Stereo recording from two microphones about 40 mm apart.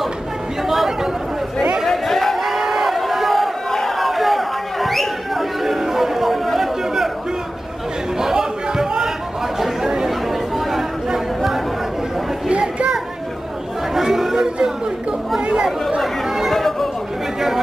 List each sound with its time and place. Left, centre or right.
0.7 s chatter: centre
1.9 s a sound: centre
8.2 s chatter: centre
12.4 s children playing: right
13.9 s chatter: centre
16.5 s chatter: centre